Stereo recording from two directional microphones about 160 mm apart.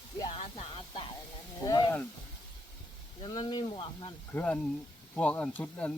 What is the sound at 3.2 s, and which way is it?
Speech, 25° left (ahead or behind).